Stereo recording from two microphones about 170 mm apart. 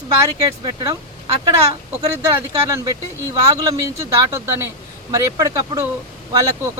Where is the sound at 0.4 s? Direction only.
20° right (ahead or behind).